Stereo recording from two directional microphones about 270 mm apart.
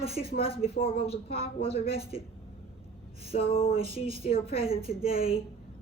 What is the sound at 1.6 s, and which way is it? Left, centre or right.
Speech, left.